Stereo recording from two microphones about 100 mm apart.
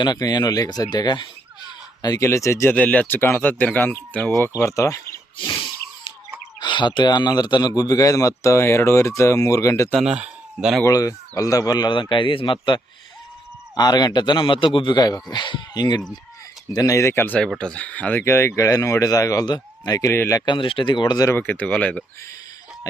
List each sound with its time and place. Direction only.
0.0 s speech: 40° left (ahead or behind)
2.0 s speech: 40° left (ahead or behind)
2.7 s speech: 15° left (ahead or behind); by 5.0 s 35° left (ahead or behind)
5.4 s a sound: 55° left (ahead or behind)
6.6 s speech: 50° left (ahead or behind); by 9.9 s 30° left (ahead or behind)
10.0 s speech: 10° right (ahead or behind)
10.8 s speech: 35° left (ahead or behind); by 12.8 s 55° left (ahead or behind)
13.7 s speech: 40° left (ahead or behind)
14.9 s speech: 40° left (ahead or behind)
16.7 s speech: 35° left (ahead or behind)
17.6 s speech: 10° left (ahead or behind); by 20.4 s 25° left (ahead or behind)
20.4 s speech: 55° left (ahead or behind)
21.2 s speech: 20° left (ahead or behind)